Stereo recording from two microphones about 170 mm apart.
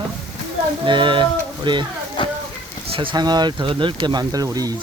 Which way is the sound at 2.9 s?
30° right (ahead or behind).